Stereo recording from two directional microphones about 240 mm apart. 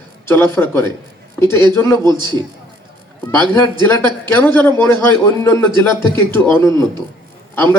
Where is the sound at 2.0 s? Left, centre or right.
Centre.